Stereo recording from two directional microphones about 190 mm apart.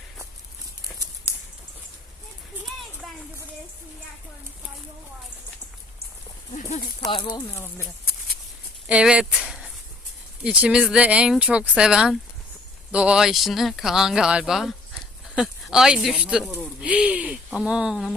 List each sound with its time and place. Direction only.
7.0 s speech: 25° left (ahead or behind)
7.5 s speech: 10° left (ahead or behind)
8.9 s a sound: 5° right (ahead or behind)
10.4 s speech: 5° right (ahead or behind)